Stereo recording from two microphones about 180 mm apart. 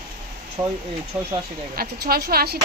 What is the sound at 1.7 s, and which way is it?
Speech, 55° right (ahead or behind).